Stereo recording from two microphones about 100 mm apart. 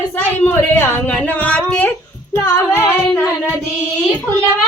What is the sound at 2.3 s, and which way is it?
Music, 20° left (ahead or behind).